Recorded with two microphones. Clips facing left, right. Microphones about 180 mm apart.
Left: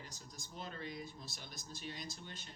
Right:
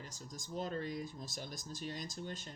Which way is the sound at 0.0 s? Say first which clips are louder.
Right 4 dB; 45° right (ahead or behind).